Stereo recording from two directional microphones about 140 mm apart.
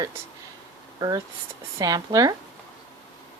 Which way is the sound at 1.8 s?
25° right (ahead or behind).